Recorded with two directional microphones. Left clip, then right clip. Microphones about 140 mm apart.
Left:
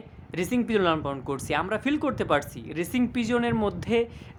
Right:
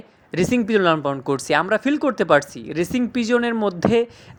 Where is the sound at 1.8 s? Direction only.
25° right (ahead or behind).